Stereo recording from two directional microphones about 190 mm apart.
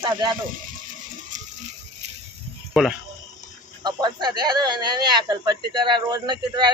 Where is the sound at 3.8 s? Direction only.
20° right (ahead or behind).